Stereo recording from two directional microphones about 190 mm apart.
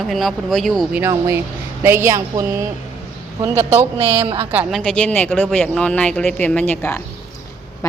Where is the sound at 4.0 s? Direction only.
25° right (ahead or behind).